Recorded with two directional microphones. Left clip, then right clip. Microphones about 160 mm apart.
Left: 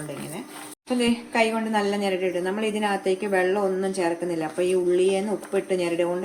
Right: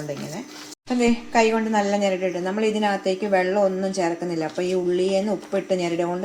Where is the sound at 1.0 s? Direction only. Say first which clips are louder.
Right 3 dB; 30° right (ahead or behind).